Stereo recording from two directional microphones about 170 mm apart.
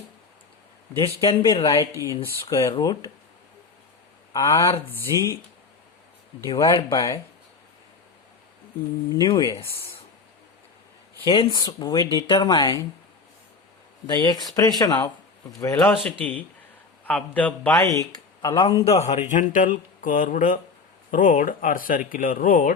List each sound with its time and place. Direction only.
0.9 s a man's voice: 30° left (ahead or behind)
1.6 s speech: 20° left (ahead or behind)
4.3 s a man's voice: 20° left (ahead or behind)
6.5 s speech: 20° left (ahead or behind)
9.1 s speech: 25° left (ahead or behind)
11.3 s speech: 25° left (ahead or behind)
14.1 s speech: 25° left (ahead or behind)
15.8 s a man's voice: 5° left (ahead or behind)
17.8 s speech: 20° left (ahead or behind)
18.9 s speech: 40° left (ahead or behind)